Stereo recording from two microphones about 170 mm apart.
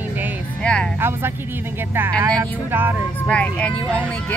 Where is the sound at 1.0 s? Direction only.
15° right (ahead or behind).